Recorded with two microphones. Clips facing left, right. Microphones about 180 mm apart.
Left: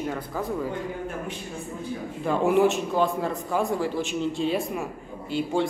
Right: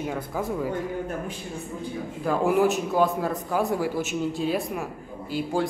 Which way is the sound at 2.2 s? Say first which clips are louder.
Left 1 dB; 5° right (ahead or behind).